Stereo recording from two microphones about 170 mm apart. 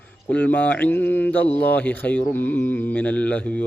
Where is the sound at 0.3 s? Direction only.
10° left (ahead or behind).